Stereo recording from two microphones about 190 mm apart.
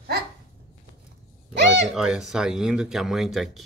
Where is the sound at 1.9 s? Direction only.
5° right (ahead or behind).